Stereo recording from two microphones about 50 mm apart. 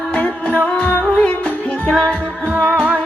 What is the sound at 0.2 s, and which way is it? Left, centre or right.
Music, left.